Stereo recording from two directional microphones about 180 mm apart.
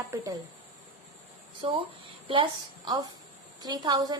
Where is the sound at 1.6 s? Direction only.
30° right (ahead or behind).